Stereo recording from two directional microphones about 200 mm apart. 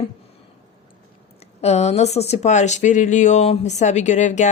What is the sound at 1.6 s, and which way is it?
Speech, 30° left (ahead or behind).